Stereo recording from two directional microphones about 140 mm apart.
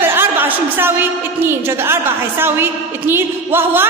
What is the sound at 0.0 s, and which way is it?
A woman's voice, 15° right (ahead or behind).